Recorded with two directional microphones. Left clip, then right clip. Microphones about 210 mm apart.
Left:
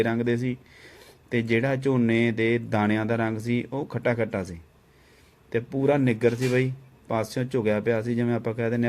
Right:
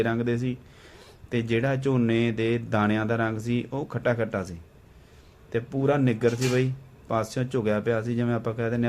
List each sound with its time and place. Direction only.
0.0 s speech: 15° left (ahead or behind)